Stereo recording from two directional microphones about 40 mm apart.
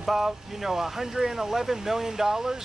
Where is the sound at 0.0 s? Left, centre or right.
Centre.